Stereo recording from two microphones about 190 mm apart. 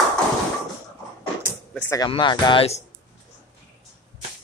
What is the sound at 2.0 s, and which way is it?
Speech, 25° left (ahead or behind).